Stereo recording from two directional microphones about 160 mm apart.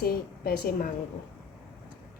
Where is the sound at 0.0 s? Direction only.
70° left (ahead or behind).